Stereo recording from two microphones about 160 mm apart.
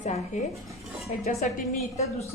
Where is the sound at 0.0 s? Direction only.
45° left (ahead or behind).